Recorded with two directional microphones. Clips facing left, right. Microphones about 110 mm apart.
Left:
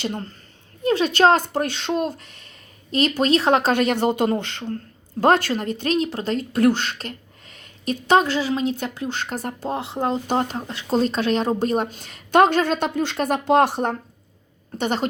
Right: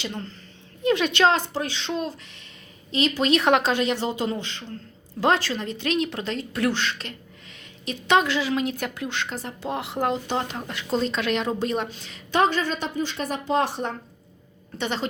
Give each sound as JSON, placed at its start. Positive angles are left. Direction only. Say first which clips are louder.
{"t": 0.0, "sound": "a woman's voice", "louder": "left 5 dB", "side_deg": 45}
{"t": 3.3, "sound": "a woman's voice", "louder": "left 1 dB", "side_deg": 35}
{"t": 3.7, "sound": "a woman's voice", "louder": "left 5 dB", "side_deg": 55}
{"t": 9.7, "sound": "speech", "louder": "even", "side_deg": 30}
{"t": 10.2, "sound": "a woman's voice", "louder": "left 5 dB", "side_deg": 40}
{"t": 14.8, "sound": "a woman's voice", "louder": "left 5 dB", "side_deg": 45}